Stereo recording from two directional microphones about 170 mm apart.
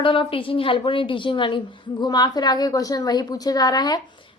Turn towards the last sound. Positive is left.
turn(degrees=25)  # may be behind; listen again after turning